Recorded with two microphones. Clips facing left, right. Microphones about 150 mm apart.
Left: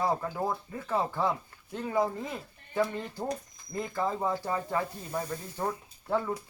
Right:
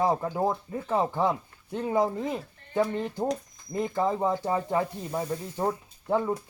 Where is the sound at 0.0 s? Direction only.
25° right (ahead or behind).